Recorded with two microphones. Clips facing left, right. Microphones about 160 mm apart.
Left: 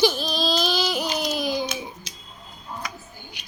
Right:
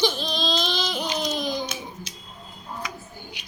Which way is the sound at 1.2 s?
10° left (ahead or behind).